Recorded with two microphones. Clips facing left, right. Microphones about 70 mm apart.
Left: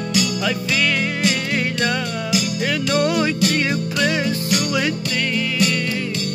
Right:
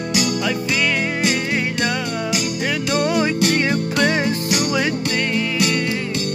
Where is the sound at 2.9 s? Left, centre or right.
Right.